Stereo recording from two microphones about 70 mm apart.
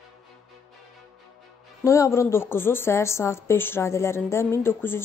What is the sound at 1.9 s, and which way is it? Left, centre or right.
A woman's voice, left.